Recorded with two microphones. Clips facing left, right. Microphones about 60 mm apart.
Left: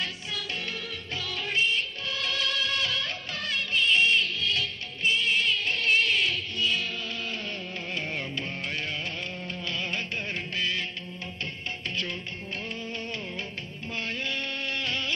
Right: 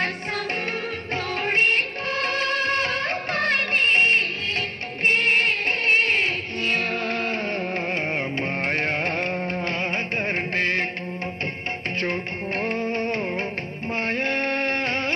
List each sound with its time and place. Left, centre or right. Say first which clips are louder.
1.1 s music: right 7 dB; right
12.0 s music: right 8 dB; right
13.9 s a sound: right 8 dB; right